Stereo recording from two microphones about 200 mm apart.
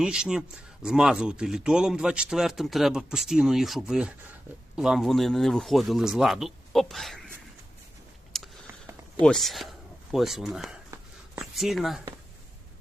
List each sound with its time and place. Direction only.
0.0 s speech: 5° right (ahead or behind)
8.3 s a sound: centre (ahead or behind)
9.2 s speech: centre (ahead or behind)